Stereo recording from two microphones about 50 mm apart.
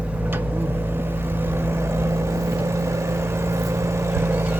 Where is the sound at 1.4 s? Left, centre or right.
Right.